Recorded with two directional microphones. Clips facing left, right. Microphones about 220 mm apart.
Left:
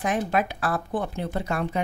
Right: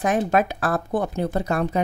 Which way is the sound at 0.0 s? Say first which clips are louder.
Right 4 dB; 45° right (ahead or behind).